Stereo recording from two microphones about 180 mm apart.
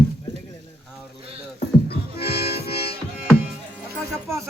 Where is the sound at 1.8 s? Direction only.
60° left (ahead or behind).